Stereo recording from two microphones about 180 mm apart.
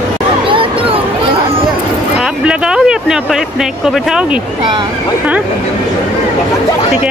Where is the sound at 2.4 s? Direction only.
5° right (ahead or behind).